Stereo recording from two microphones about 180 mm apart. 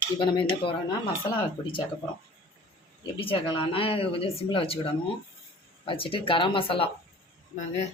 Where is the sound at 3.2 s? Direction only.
30° left (ahead or behind).